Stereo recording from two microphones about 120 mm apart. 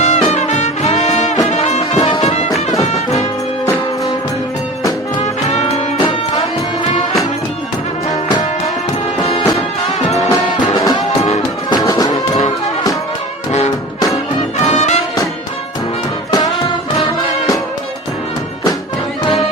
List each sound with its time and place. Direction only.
0.0 s music: 70° left (ahead or behind)
2.0 s music: 55° left (ahead or behind)
5.2 s music: 70° left (ahead or behind)
9.2 s music: 55° left (ahead or behind)
10.2 s music: 30° left (ahead or behind)
14.6 s music: 70° left (ahead or behind)
16.3 s music: 35° left (ahead or behind)